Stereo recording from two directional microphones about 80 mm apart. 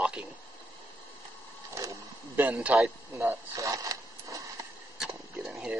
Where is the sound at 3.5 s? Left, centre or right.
Right.